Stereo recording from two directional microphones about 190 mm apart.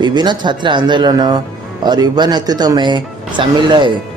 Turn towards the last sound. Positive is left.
turn(degrees=-25)  # may be behind; listen again after turning